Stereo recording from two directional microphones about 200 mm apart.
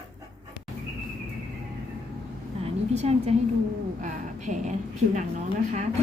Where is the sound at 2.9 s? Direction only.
35° right (ahead or behind).